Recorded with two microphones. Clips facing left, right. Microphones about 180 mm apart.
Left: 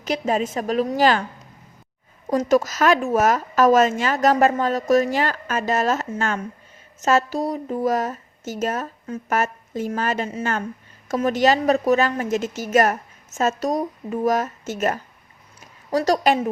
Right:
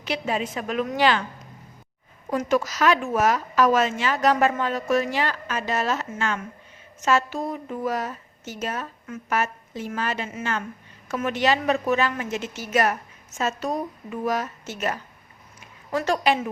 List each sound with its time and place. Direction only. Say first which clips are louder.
0.0 s speech: left 4 dB; 40° left (ahead or behind)
2.3 s a woman's voice: left 5 dB; 40° left (ahead or behind)